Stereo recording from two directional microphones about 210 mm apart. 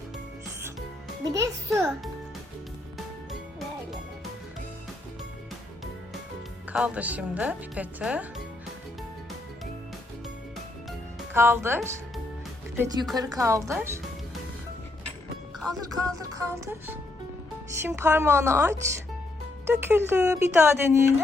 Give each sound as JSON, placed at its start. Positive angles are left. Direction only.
{"t": 1.2, "sound": "speech", "side_deg": -15}
{"t": 6.7, "sound": "speech", "side_deg": -5}
{"t": 11.3, "sound": "speech", "side_deg": -10}
{"t": 16.0, "sound": "speech", "side_deg": -15}